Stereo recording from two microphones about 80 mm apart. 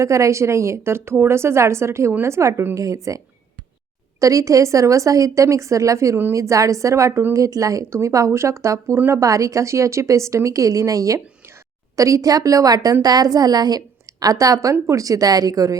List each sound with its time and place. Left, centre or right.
0.0 s a woman's voice: right
4.2 s a woman's voice: right